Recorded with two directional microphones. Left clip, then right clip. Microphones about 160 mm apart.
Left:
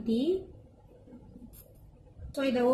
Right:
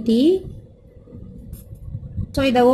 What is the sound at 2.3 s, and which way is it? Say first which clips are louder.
Speech: right 12 dB; 45° right (ahead or behind).